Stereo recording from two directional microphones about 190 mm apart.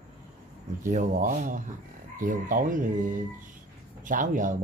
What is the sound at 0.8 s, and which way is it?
A man's voice, 40° right (ahead or behind).